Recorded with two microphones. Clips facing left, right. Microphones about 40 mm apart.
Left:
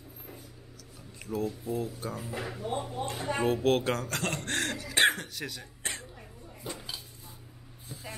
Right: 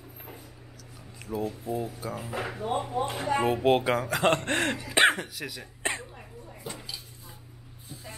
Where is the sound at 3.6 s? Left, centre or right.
Centre.